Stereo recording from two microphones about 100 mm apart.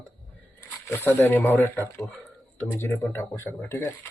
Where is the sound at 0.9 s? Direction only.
25° left (ahead or behind).